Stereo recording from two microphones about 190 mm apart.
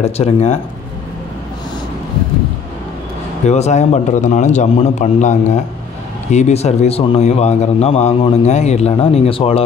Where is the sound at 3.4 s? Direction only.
35° left (ahead or behind).